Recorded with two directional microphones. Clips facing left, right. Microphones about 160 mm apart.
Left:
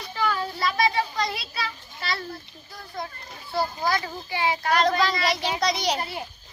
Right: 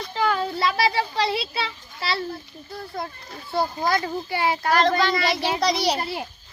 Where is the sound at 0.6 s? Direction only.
30° right (ahead or behind).